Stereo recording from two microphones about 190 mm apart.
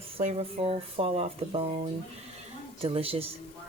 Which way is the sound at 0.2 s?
30° right (ahead or behind).